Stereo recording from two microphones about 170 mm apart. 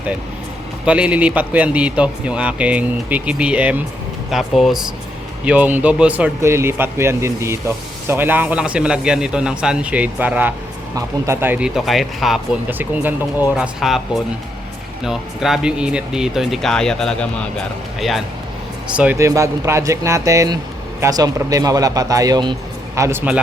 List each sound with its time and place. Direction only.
0.9 s a man's voice: 5° right (ahead or behind)
12.8 s a man's voice: 10° right (ahead or behind)
15.0 s speech: centre (ahead or behind)
18.9 s a man's voice: 15° right (ahead or behind)